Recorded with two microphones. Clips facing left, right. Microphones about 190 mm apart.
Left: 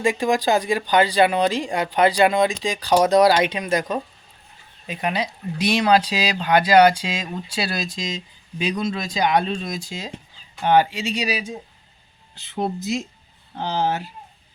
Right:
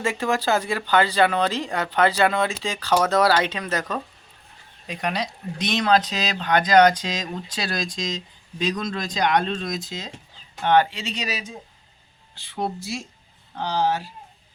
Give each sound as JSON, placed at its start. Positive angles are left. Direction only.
{"t": 0.0, "sound": "speech", "side_deg": 15}
{"t": 12.4, "sound": "speech", "side_deg": 20}